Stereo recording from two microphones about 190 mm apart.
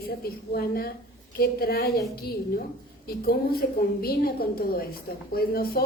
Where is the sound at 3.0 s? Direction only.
50° left (ahead or behind).